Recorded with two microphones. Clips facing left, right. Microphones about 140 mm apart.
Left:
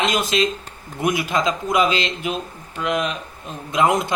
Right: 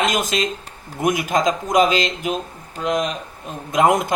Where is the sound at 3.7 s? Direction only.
50° right (ahead or behind).